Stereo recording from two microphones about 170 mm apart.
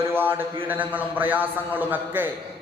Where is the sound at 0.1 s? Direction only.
10° right (ahead or behind).